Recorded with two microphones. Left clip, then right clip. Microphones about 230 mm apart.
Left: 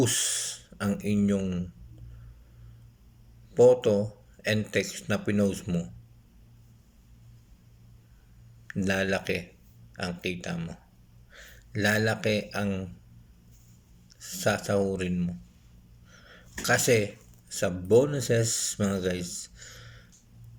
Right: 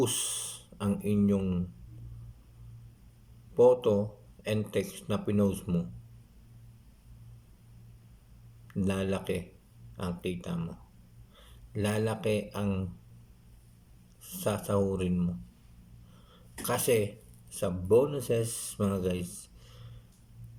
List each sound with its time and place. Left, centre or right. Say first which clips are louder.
0.0 s speech: left 4 dB; centre
3.5 s speech: left 3 dB; centre
8.6 s speech: left 5 dB; centre
14.2 s speech: left 5 dB; centre
16.6 s speech: left 4 dB; centre